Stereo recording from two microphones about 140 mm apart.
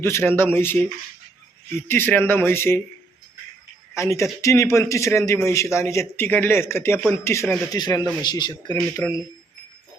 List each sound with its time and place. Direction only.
0.0 s speech: 15° left (ahead or behind)
1.9 s speech: 15° left (ahead or behind)
3.9 s a man's voice: 20° left (ahead or behind)
7.8 s a man's voice: 30° left (ahead or behind)